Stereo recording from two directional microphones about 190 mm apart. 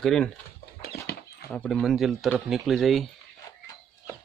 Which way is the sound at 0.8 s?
55° left (ahead or behind).